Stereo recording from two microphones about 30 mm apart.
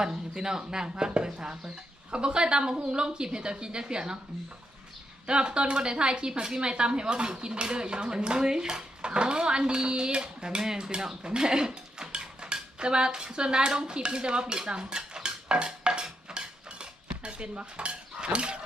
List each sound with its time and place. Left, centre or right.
0.0 s a woman's voice: right
5.2 s a woman's voice: right
11.2 s speech: right
14.7 s dishes: right
16.3 s cutlery: right